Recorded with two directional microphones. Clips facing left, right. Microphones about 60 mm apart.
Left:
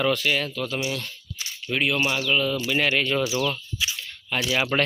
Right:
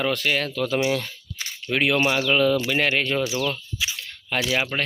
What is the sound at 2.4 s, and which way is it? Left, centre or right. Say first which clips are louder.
Speech: right 6 dB; right.